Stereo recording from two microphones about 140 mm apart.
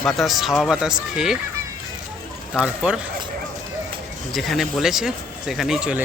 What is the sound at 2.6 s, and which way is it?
Speech, 10° right (ahead or behind).